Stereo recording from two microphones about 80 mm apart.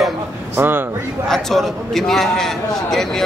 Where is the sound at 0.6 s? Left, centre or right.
Right.